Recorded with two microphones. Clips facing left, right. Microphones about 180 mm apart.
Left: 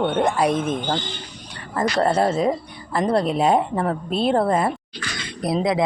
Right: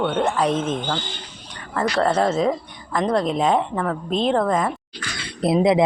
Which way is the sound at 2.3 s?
10° left (ahead or behind).